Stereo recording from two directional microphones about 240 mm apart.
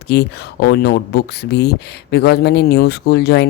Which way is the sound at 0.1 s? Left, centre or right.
Left.